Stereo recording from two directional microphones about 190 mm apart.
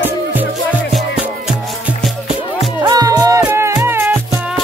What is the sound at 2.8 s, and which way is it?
Music, 20° right (ahead or behind).